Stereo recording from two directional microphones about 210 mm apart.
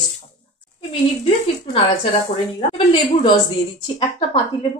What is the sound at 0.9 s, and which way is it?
A woman's voice, 30° left (ahead or behind).